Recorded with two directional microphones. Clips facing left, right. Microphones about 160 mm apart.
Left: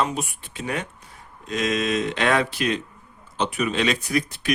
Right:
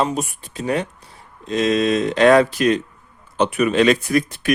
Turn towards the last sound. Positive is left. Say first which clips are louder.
# right 5 dB
turn(degrees=-50)  # may be behind; listen again after turning